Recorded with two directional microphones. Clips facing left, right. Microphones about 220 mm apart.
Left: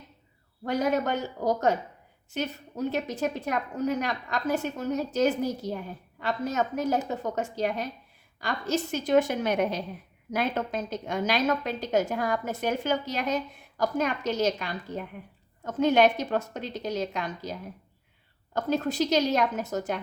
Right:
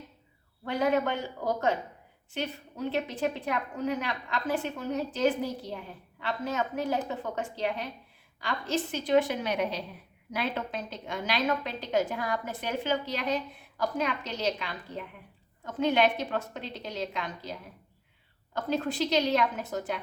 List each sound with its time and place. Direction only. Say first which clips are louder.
0.6 s a woman's voice: left 1 dB; 45° left (ahead or behind)
18.5 s a woman's voice: left 3 dB; 45° left (ahead or behind)